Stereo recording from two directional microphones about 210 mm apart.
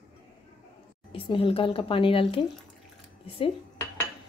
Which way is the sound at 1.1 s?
25° left (ahead or behind).